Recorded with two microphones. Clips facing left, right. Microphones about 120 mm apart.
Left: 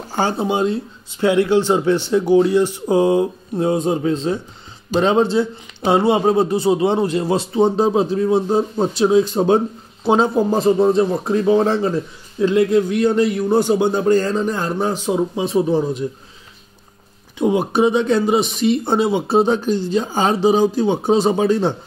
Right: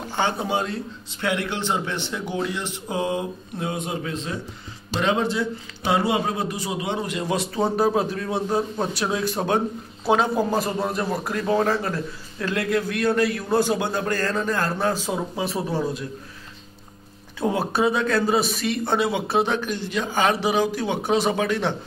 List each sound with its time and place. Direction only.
0.1 s speech: 30° left (ahead or behind)
17.4 s speech: 20° left (ahead or behind)